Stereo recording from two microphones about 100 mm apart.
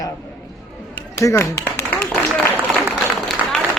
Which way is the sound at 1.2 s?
25° left (ahead or behind).